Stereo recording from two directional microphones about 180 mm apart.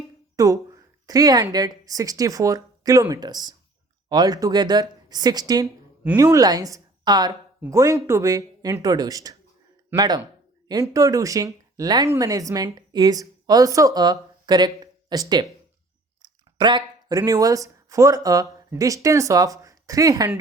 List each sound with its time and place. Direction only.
0.3 s a woman's voice: 20° right (ahead or behind)
5.6 s a woman's voice: 10° right (ahead or behind)
10.7 s speech: 20° right (ahead or behind)